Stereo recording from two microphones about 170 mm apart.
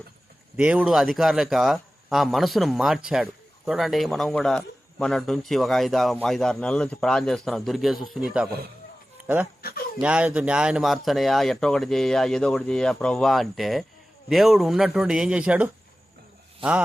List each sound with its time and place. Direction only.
0.5 s speech: 10° right (ahead or behind)
9.6 s a sound: 60° left (ahead or behind)
10.0 s speech: 5° right (ahead or behind)
16.6 s speech: 30° right (ahead or behind)